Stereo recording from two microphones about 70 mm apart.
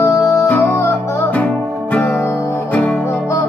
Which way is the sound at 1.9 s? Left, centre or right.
Left.